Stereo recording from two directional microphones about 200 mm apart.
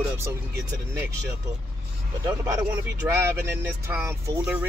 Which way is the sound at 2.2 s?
20° right (ahead or behind).